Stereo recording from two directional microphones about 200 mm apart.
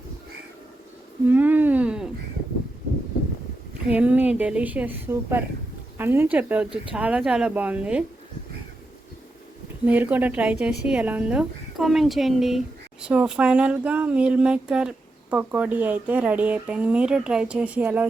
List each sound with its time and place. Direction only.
1.3 s a sound: 10° right (ahead or behind)
3.8 s speech: 5° right (ahead or behind)
9.8 s speech: 10° right (ahead or behind)